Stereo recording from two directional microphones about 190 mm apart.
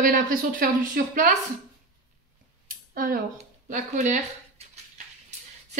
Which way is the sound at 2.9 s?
50° right (ahead or behind).